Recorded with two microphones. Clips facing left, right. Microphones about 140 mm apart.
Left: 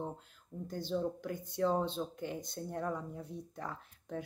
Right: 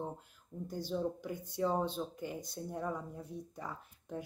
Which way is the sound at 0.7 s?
10° right (ahead or behind).